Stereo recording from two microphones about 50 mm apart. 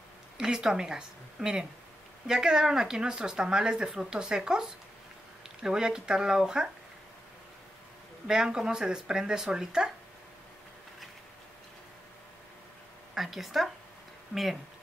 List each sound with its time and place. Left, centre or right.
0.4 s speech: centre
8.3 s speech: centre
13.1 s a woman's voice: centre